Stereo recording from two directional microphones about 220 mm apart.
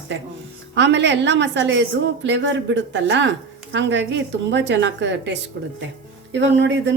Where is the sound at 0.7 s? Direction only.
55° right (ahead or behind).